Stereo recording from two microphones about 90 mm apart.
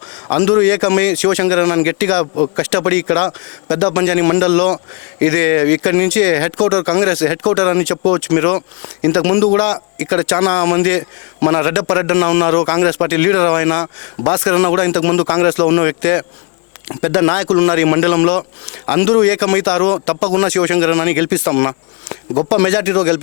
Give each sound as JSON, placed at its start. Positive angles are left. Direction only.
{"t": 0.3, "sound": "speech", "side_deg": 20}
{"t": 2.3, "sound": "a man's voice", "side_deg": 30}